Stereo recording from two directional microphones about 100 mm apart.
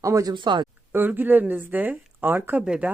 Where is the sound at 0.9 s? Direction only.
20° right (ahead or behind).